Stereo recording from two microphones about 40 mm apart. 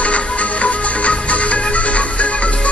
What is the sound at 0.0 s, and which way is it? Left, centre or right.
Music, left.